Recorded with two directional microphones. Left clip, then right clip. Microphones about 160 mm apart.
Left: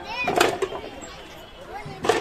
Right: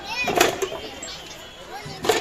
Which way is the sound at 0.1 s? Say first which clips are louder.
Right 1 dB; 35° right (ahead or behind).